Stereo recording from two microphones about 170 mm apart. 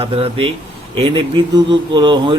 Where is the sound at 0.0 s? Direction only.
30° right (ahead or behind).